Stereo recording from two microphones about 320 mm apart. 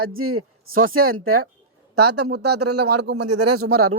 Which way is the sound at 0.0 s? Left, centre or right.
Right.